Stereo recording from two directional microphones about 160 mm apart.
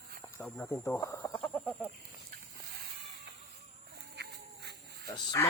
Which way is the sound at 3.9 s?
90° right.